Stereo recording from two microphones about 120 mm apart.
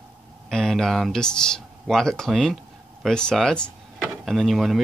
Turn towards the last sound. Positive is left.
turn(degrees=0)  # may be behind; listen again after turning